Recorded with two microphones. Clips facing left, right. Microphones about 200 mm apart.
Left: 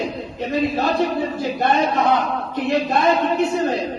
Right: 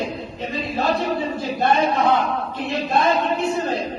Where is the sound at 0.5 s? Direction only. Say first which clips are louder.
Left 3 dB; 55° left (ahead or behind).